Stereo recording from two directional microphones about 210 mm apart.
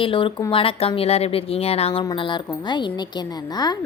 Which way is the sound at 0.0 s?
25° left (ahead or behind).